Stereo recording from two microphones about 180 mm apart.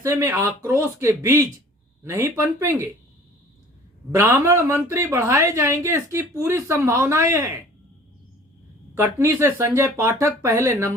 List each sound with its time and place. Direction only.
0.0 s speech: 15° right (ahead or behind)
4.1 s speech: 15° right (ahead or behind)
9.0 s speech: 15° right (ahead or behind)